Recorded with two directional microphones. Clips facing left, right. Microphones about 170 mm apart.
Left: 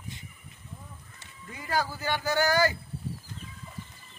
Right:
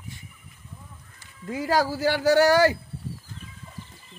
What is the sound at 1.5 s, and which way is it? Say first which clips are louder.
Speech: right 7 dB; 90° right.